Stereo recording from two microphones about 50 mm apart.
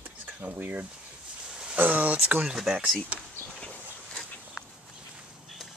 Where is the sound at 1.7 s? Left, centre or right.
Right.